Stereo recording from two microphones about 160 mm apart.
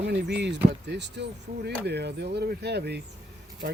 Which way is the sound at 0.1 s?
90° right.